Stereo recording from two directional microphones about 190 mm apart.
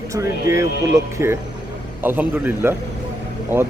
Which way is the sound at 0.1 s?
15° right (ahead or behind).